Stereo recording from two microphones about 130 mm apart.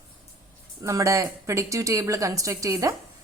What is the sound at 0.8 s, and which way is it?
A woman's voice, 25° right (ahead or behind).